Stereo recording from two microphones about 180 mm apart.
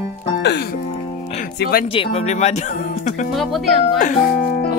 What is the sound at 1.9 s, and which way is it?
Speech, 35° left (ahead or behind).